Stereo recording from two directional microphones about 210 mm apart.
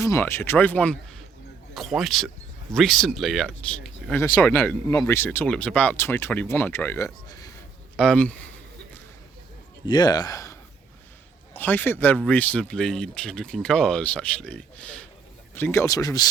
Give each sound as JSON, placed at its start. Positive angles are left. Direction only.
{"t": 0.0, "sound": "speech", "side_deg": 15}
{"t": 7.9, "sound": "speech", "side_deg": 5}
{"t": 9.8, "sound": "speech", "side_deg": 20}